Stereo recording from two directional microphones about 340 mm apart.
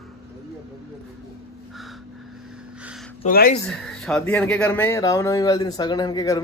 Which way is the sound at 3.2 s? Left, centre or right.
Left.